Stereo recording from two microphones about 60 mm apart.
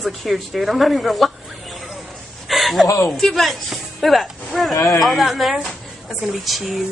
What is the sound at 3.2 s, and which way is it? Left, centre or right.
A woman's voice, centre.